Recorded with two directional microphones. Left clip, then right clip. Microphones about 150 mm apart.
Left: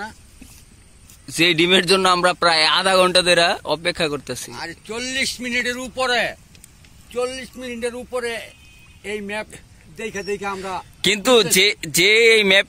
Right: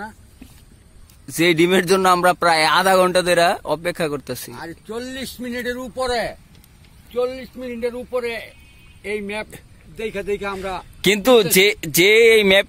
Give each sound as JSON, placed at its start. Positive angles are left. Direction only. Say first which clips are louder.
{"t": 1.2, "sound": "speech", "louder": "even", "side_deg": -10}
{"t": 4.6, "sound": "speech", "louder": "left 2 dB", "side_deg": -80}
{"t": 6.0, "sound": "speech", "louder": "left 3 dB", "side_deg": -20}
{"t": 7.1, "sound": "a man's voice", "louder": "right 2 dB", "side_deg": -5}
{"t": 11.0, "sound": "speech", "louder": "right 1 dB", "side_deg": -20}